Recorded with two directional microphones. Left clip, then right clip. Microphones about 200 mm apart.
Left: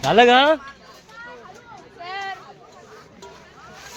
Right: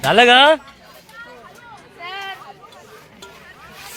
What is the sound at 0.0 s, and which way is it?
Speech, 5° left (ahead or behind).